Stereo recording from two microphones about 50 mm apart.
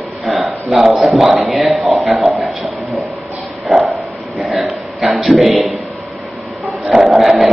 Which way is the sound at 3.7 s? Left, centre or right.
Centre.